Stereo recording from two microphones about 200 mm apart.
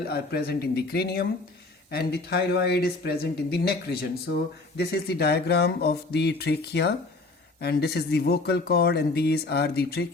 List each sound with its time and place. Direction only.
0.0 s speech: 50° left (ahead or behind)